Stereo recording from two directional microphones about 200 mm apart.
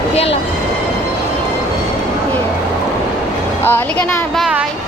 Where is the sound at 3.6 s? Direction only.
10° left (ahead or behind).